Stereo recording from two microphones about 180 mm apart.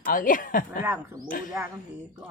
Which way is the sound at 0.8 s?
10° right (ahead or behind).